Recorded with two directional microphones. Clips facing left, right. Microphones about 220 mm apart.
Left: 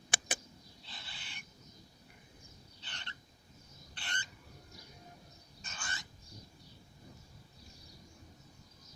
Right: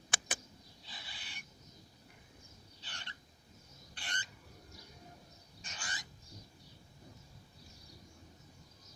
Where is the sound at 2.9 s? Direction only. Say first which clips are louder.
Left 1 dB; 10° right (ahead or behind).